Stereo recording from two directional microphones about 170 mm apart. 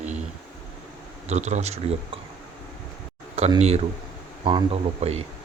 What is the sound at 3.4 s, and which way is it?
Speech, 35° right (ahead or behind).